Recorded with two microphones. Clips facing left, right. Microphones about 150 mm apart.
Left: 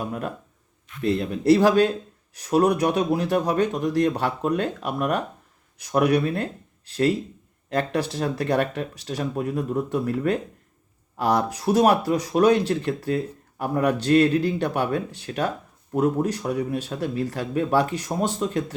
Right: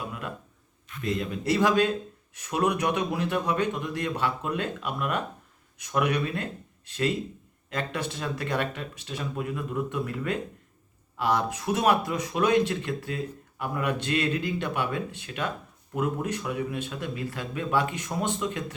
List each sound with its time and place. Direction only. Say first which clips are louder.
0.0 s speech: left 6 dB; 40° left (ahead or behind)